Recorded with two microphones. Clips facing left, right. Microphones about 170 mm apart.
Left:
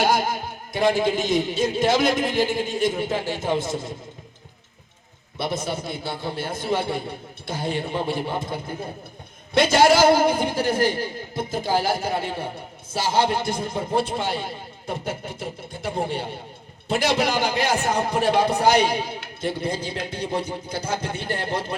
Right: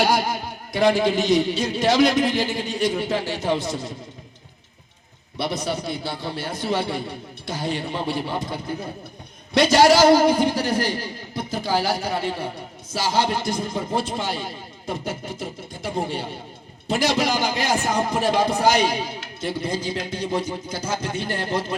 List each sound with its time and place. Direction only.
0.0 s speech: 50° left (ahead or behind)
5.4 s speech: 50° left (ahead or behind)